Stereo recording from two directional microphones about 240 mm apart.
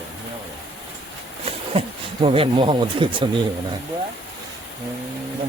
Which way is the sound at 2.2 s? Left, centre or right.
Right.